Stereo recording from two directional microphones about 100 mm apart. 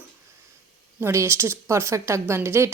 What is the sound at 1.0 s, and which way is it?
A woman's voice, 25° right (ahead or behind).